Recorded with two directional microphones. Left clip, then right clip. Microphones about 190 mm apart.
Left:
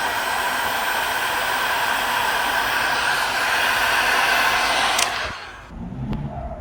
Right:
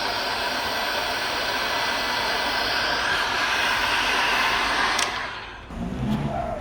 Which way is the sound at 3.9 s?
20° left (ahead or behind).